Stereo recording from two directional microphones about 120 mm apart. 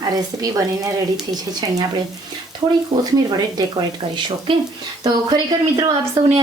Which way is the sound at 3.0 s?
35° right (ahead or behind).